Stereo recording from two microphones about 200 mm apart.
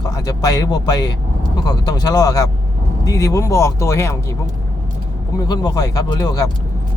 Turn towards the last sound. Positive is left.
turn(degrees=20)  # may be behind; listen again after turning